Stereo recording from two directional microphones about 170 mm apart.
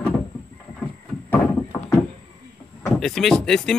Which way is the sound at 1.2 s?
15° left (ahead or behind).